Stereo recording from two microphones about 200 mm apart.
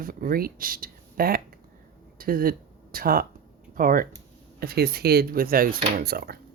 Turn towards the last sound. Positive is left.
turn(degrees=-50)  # may be behind; listen again after turning